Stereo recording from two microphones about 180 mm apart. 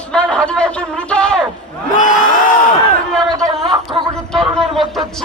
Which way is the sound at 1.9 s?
45° left (ahead or behind).